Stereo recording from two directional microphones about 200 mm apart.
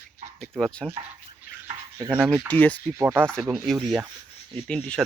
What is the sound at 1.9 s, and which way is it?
Stir, 10° right (ahead or behind).